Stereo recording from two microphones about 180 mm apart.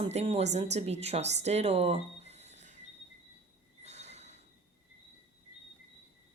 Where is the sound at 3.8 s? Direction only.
40° right (ahead or behind).